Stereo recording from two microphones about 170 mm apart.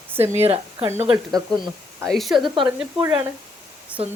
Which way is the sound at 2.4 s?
25° right (ahead or behind).